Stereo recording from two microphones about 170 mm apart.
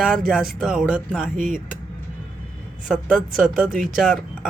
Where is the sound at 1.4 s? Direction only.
50° right (ahead or behind).